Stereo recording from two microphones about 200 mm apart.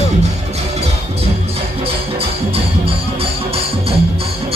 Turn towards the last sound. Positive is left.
turn(degrees=-30)  # may be behind; listen again after turning